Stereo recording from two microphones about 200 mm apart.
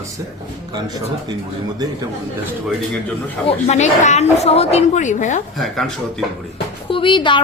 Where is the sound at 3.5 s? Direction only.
35° left (ahead or behind).